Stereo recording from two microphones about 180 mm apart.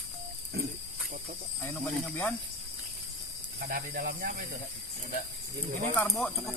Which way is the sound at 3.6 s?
55° right (ahead or behind).